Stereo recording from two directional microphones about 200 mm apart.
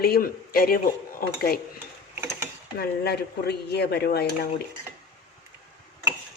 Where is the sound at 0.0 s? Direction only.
50° left (ahead or behind).